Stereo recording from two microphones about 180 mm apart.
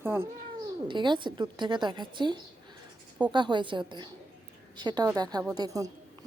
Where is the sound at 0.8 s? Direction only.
25° right (ahead or behind).